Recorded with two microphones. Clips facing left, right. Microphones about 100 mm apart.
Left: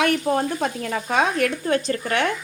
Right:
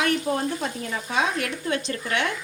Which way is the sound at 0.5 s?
60° left (ahead or behind).